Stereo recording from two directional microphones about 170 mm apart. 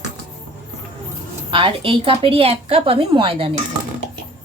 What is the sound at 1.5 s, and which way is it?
A woman's voice, 30° right (ahead or behind).